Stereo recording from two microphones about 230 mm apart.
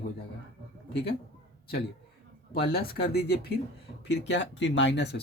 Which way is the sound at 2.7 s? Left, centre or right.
Left.